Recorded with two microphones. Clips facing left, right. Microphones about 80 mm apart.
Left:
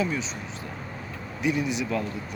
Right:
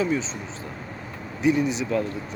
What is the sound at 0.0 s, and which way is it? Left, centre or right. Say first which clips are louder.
Speech: right 4 dB; right.